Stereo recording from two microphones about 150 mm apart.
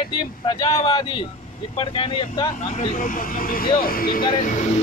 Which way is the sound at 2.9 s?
60° left (ahead or behind).